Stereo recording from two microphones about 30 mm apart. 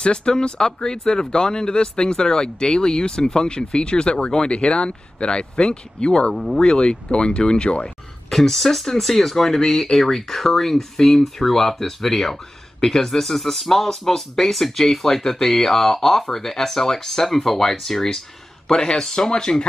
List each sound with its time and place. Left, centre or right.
0.0 s speech: left
6.3 s speech: centre
6.6 s speech: left
8.3 s speech: centre
19.1 s speech: left